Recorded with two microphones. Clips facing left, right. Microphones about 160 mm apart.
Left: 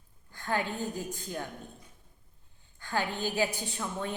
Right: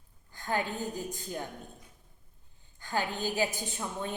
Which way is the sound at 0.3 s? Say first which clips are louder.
Even; 15° right (ahead or behind).